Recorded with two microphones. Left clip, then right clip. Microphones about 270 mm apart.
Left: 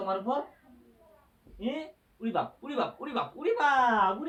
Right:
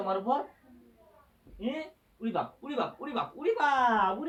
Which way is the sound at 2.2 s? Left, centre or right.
Centre.